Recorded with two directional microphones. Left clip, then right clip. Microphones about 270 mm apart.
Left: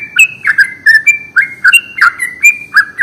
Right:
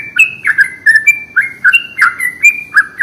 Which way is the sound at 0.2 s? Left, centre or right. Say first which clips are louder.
Left 2 dB; left.